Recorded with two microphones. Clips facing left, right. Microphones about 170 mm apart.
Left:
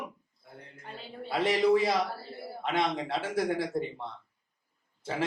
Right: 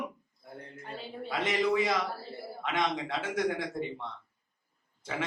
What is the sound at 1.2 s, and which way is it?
Speech, 35° left (ahead or behind).